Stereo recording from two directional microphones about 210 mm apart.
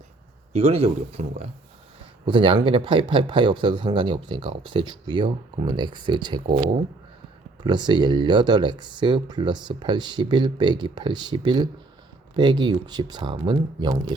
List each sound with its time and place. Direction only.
0.5 s speech: 30° right (ahead or behind)
7.6 s speech: 20° right (ahead or behind)